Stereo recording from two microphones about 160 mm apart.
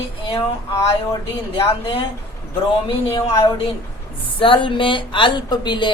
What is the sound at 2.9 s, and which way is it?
A woman's voice, 35° left (ahead or behind).